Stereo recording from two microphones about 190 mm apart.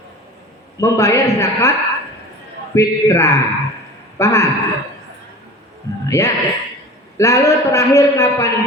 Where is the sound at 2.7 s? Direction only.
15° left (ahead or behind).